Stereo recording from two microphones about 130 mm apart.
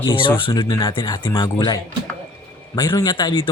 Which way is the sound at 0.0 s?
40° left (ahead or behind).